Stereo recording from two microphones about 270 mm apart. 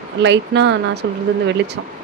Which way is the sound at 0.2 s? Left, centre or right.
Right.